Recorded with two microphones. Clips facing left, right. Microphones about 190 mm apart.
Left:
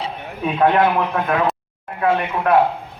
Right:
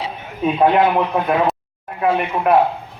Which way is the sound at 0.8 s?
20° right (ahead or behind).